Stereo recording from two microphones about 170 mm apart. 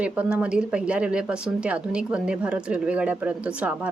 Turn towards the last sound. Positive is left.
turn(degrees=-10)  # may be behind; listen again after turning